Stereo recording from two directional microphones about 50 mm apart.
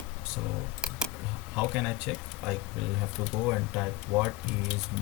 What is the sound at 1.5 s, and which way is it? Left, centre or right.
Speech, centre.